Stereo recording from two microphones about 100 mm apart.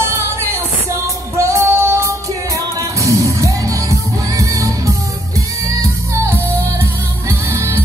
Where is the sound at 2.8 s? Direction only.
30° right (ahead or behind).